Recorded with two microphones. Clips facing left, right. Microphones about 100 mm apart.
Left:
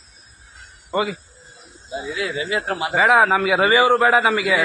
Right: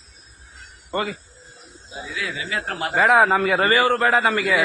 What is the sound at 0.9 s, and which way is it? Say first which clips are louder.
Speech: left 3 dB; 10° left (ahead or behind).